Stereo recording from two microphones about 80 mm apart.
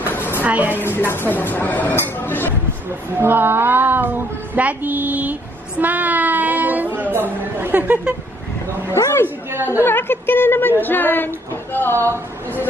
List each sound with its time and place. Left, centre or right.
0.1 s a sound: left
0.4 s a woman's voice: right
0.7 s a woman's voice: left
3.2 s child singing: right
8.9 s a woman's voice: left